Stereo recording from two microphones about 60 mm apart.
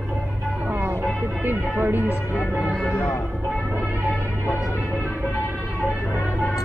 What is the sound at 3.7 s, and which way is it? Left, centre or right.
Vehicle, right.